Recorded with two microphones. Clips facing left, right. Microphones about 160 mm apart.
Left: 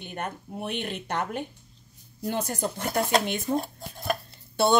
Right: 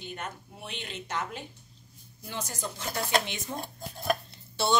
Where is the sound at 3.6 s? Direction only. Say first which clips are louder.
Left 1 dB; centre (ahead or behind).